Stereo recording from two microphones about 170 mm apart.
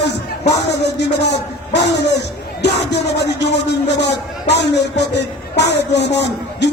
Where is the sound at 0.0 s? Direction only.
80° left.